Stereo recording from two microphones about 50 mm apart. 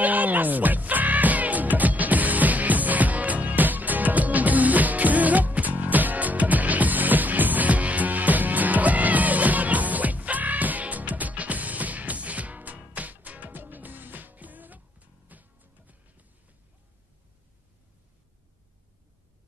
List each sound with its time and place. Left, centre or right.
0.0 s music: right